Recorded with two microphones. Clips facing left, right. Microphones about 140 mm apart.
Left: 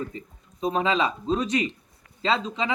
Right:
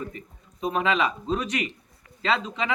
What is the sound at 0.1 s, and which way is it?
A man's voice, 30° left (ahead or behind).